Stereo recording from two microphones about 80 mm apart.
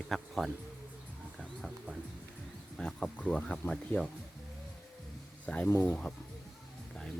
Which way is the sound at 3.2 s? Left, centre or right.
Centre.